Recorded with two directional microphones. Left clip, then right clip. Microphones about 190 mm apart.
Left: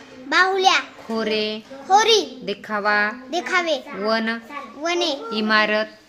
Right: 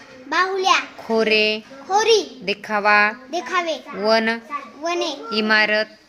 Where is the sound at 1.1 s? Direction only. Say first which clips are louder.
Right 7 dB; 10° right (ahead or behind).